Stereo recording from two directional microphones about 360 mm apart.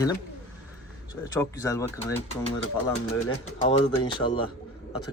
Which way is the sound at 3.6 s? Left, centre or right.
Centre.